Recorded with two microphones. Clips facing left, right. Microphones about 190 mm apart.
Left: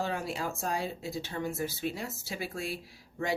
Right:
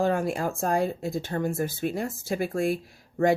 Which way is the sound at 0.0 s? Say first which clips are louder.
Right 8 dB; 50° right (ahead or behind).